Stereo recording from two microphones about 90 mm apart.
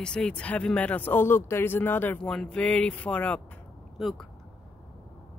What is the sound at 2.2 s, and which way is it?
Speech, 5° left (ahead or behind).